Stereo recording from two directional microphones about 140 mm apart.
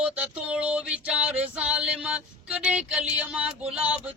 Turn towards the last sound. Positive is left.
turn(degrees=-5)  # may be behind; listen again after turning